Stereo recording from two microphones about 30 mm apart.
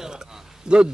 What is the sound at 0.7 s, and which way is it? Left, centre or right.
Speech, right.